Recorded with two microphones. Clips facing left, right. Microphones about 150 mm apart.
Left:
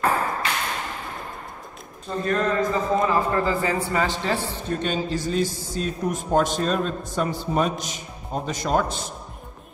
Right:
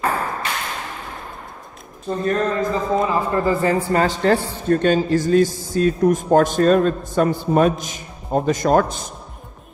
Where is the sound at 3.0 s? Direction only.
20° right (ahead or behind).